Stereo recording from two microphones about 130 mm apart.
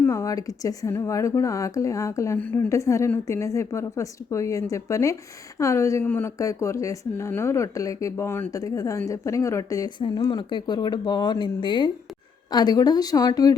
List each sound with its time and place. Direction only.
0.0 s speech: 20° left (ahead or behind)